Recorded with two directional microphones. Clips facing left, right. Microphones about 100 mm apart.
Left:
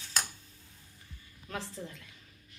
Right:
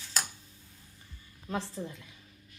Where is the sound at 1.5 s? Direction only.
20° right (ahead or behind).